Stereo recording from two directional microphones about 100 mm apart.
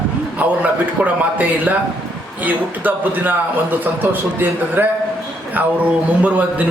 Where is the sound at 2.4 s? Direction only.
15° right (ahead or behind).